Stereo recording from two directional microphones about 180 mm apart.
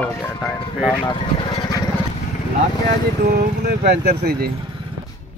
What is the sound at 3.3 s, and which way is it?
Speech, 65° right (ahead or behind).